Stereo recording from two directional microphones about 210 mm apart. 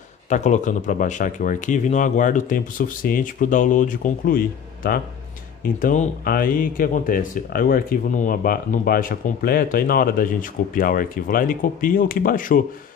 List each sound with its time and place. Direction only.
0.3 s speech: 35° left (ahead or behind)